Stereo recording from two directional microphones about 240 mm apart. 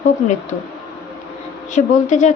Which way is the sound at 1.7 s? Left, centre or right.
Left.